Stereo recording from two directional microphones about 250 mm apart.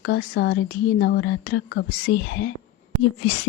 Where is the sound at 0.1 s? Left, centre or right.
Left.